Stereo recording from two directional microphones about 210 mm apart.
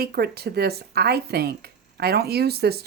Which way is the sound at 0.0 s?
45° right (ahead or behind).